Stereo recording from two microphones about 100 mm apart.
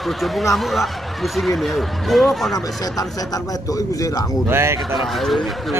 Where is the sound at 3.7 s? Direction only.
35° left (ahead or behind).